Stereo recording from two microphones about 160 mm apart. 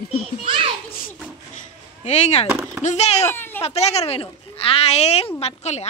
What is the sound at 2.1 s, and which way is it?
A woman's voice, 40° left (ahead or behind).